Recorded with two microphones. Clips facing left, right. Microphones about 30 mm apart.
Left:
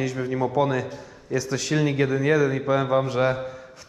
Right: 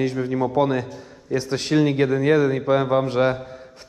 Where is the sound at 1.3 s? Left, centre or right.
Right.